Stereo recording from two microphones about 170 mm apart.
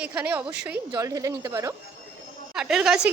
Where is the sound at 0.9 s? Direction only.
20° right (ahead or behind).